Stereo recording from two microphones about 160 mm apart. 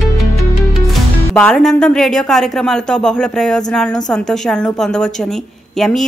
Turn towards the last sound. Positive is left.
turn(degrees=0)  # may be behind; listen again after turning